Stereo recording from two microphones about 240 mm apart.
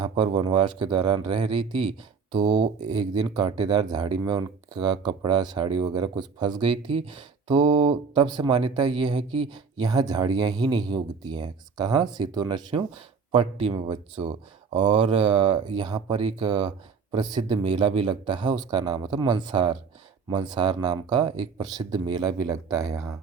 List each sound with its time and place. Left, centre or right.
0.0 s speech: centre